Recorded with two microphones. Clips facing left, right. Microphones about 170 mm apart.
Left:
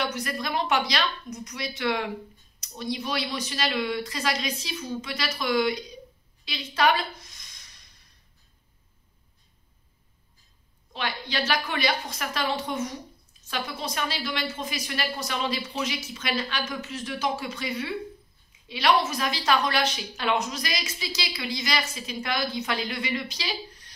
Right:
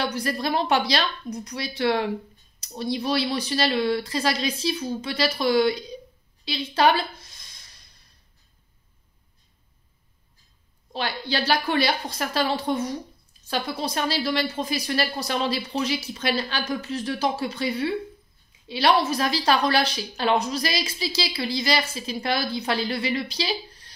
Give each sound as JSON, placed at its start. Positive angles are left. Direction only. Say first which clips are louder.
{"t": 0.0, "sound": "a woman's voice", "louder": "right 4 dB", "side_deg": -30}
{"t": 10.9, "sound": "a woman's voice", "louder": "right 4 dB", "side_deg": -35}